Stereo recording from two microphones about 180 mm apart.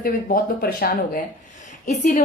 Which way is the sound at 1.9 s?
40° left (ahead or behind).